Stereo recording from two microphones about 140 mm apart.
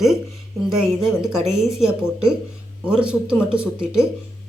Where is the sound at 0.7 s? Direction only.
5° right (ahead or behind).